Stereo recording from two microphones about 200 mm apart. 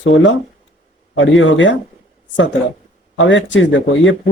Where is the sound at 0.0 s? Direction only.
70° left (ahead or behind).